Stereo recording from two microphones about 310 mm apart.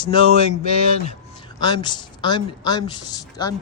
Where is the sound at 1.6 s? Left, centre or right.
Centre.